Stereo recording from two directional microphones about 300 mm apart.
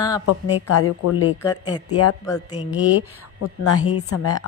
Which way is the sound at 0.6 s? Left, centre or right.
Left.